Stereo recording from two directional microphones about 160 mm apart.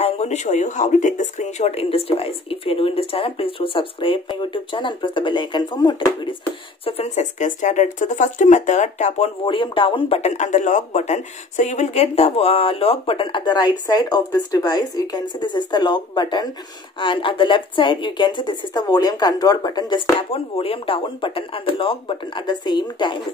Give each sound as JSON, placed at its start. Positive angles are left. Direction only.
{"t": 0.0, "sound": "speech", "side_deg": 45}
{"t": 9.4, "sound": "speech", "side_deg": 35}